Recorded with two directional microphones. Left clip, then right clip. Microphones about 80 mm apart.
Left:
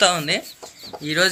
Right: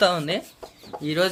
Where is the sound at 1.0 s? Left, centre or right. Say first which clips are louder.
Left 4 dB; centre.